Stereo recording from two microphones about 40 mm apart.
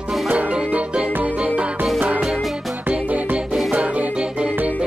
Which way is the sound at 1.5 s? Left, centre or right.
Right.